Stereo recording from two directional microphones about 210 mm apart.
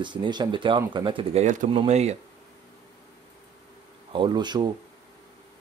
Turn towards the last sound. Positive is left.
turn(degrees=-20)  # may be behind; listen again after turning